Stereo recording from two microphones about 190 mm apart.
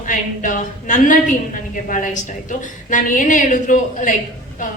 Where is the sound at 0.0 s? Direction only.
45° left (ahead or behind).